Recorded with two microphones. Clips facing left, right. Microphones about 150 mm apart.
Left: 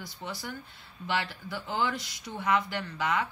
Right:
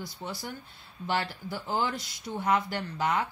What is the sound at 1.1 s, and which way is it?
Speech, 40° right (ahead or behind).